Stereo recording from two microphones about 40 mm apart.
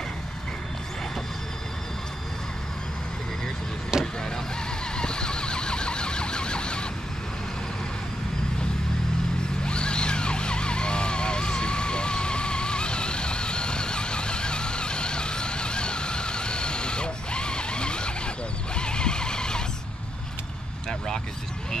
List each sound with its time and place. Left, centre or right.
3.9 s vehicle: centre
4.9 s vehicle: left
9.6 s vehicle: left